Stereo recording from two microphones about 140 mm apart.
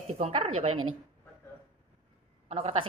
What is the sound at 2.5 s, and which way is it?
Speech, 45° right (ahead or behind).